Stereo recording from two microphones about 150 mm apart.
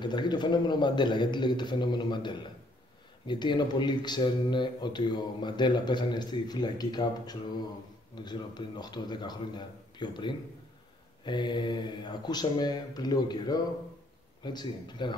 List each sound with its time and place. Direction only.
0.0 s speech: 30° left (ahead or behind)